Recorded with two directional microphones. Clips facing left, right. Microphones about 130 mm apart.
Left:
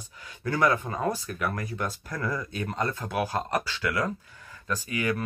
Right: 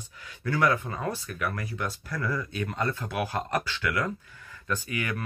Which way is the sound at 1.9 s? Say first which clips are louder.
Even; 20° left (ahead or behind).